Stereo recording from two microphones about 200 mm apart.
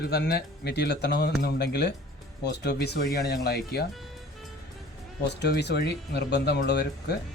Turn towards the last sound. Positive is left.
turn(degrees=55)  # may be behind; listen again after turning